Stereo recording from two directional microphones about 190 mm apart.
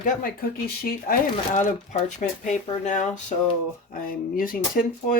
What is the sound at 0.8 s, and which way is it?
Speech, 45° left (ahead or behind).